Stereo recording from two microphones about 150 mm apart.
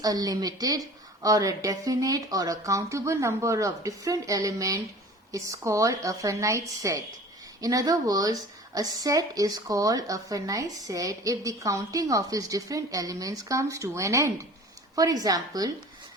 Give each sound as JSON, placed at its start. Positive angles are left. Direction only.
{"t": 0.0, "sound": "a woman's voice", "side_deg": -25}